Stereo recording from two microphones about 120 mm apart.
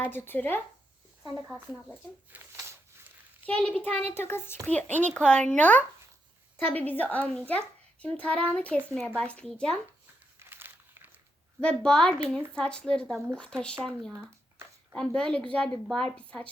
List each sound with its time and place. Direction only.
0.0 s a woman's voice: 15° left (ahead or behind)
2.3 s speech: 15° right (ahead or behind)
3.4 s a woman's voice: 10° left (ahead or behind)
10.4 s crumpling: 20° right (ahead or behind)
11.6 s a woman's voice: 5° left (ahead or behind)